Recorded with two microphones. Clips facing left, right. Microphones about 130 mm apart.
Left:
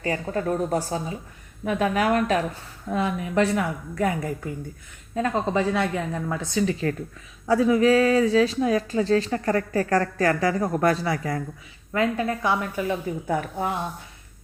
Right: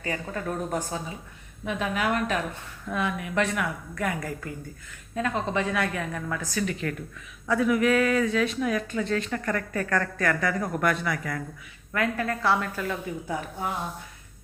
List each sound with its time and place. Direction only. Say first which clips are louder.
0.0 s a woman's voice: left 5 dB; 35° left (ahead or behind)
11.9 s a woman's voice: left 4 dB; 20° left (ahead or behind)